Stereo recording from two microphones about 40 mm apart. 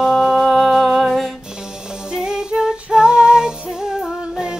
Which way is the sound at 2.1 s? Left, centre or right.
Centre.